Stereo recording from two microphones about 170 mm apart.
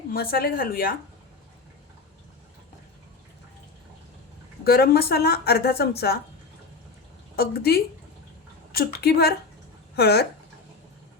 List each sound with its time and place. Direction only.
0.1 s speech: 60° left (ahead or behind)
4.6 s speech: 65° left (ahead or behind)
7.3 s speech: 65° left (ahead or behind)